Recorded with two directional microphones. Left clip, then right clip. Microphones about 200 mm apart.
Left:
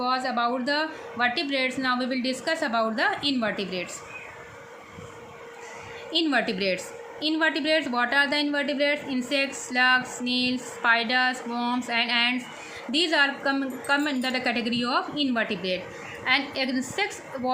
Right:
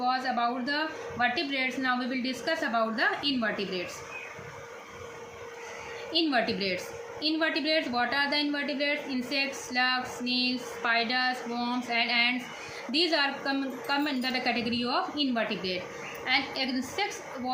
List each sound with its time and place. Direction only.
0.0 s a woman's voice: 50° left (ahead or behind)
6.1 s a woman's voice: 45° left (ahead or behind)